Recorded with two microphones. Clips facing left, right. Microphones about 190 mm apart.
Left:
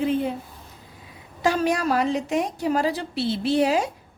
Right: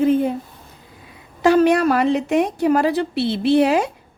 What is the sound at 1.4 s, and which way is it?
A woman's voice, 65° right (ahead or behind).